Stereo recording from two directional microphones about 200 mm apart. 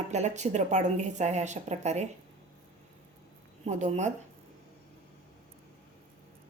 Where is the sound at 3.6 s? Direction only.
35° right (ahead or behind).